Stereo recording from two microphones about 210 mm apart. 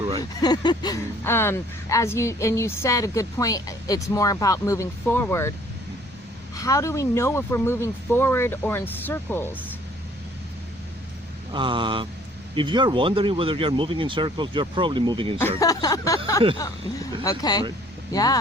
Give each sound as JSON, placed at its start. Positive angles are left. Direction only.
{"t": 0.4, "sound": "a woman's voice", "side_deg": 20}
{"t": 6.6, "sound": "a woman's voice", "side_deg": 15}
{"t": 11.5, "sound": "speech", "side_deg": -25}
{"t": 15.4, "sound": "a woman's voice", "side_deg": 10}